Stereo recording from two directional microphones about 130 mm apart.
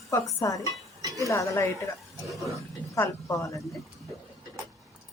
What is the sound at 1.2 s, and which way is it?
Speech, 25° left (ahead or behind).